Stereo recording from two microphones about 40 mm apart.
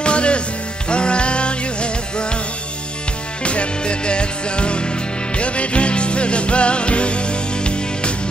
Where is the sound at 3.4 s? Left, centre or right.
Left.